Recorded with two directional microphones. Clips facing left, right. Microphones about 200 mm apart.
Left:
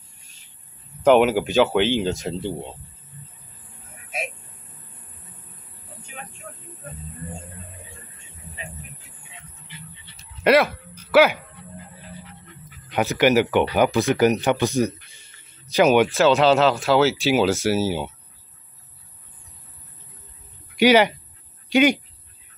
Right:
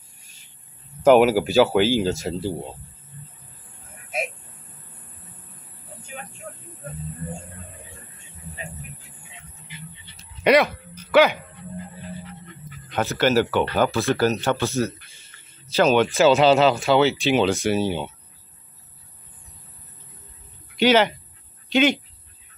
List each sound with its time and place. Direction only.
1.0 s speech: 5° right (ahead or behind)
10.4 s a sound: centre (ahead or behind)
12.9 s speech: 15° left (ahead or behind)
16.1 s speech: centre (ahead or behind)
20.7 s speech: 10° left (ahead or behind)